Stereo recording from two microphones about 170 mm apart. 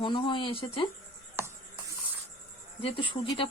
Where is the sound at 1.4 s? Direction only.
15° right (ahead or behind).